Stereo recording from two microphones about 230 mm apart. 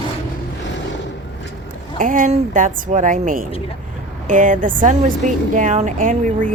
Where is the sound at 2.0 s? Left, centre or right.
Right.